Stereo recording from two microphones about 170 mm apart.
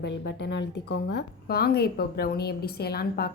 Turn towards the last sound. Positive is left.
turn(degrees=65)  # may be behind; listen again after turning